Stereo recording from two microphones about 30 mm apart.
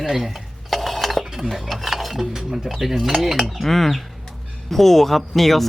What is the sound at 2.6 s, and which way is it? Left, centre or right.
Speech, centre.